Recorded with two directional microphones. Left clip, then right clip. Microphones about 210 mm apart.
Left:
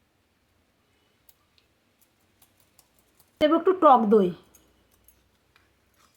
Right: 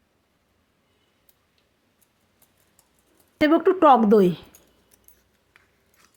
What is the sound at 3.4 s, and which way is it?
A woman's voice, 35° right (ahead or behind).